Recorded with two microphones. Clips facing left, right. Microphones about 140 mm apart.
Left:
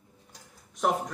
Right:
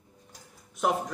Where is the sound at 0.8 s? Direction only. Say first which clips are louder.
Even; 5° right (ahead or behind).